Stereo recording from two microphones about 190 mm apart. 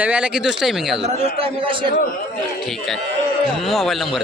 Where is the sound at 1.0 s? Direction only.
30° right (ahead or behind).